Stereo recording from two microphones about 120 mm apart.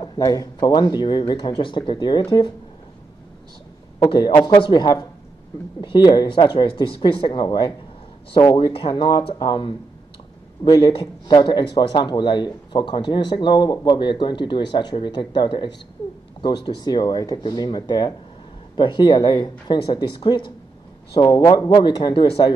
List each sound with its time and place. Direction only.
0.2 s speech: 30° left (ahead or behind)
4.0 s speech: 40° left (ahead or behind)